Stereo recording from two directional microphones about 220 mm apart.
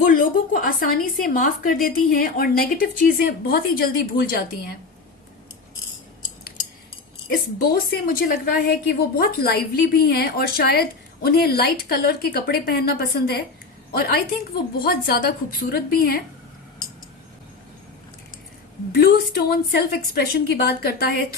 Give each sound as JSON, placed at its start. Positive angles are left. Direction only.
{"t": 0.0, "sound": "a woman's voice", "side_deg": 40}
{"t": 7.3, "sound": "a woman's voice", "side_deg": 45}
{"t": 18.9, "sound": "a woman's voice", "side_deg": 45}